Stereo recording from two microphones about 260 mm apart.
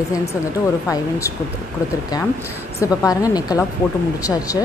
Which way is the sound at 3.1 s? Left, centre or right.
Centre.